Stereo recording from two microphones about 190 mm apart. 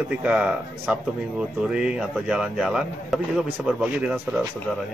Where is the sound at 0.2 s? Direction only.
5° right (ahead or behind).